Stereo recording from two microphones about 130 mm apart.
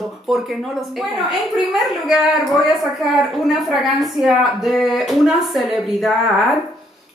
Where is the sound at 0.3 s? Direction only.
Centre (ahead or behind).